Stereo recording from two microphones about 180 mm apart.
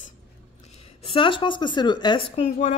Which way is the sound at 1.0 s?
30° left (ahead or behind).